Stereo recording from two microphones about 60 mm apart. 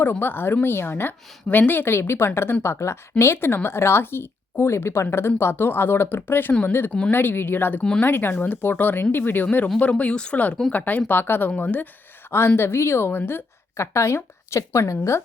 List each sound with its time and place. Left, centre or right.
0.0 s a woman's voice: left
9.9 s a woman's voice: centre
12.3 s a woman's voice: left
13.7 s a woman's voice: left